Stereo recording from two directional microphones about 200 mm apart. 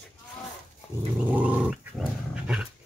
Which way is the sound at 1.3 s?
5° right (ahead or behind).